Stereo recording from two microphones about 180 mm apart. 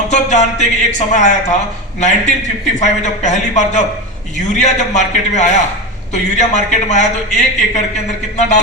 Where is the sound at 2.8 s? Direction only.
40° left (ahead or behind).